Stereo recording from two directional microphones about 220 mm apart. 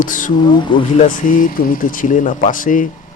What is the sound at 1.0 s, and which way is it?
Speech, 35° left (ahead or behind).